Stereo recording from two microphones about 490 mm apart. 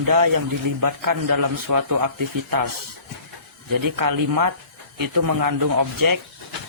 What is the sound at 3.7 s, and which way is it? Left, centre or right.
A man's voice, right.